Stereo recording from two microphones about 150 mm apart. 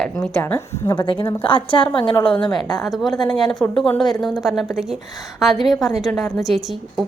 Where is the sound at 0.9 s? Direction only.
30° left (ahead or behind).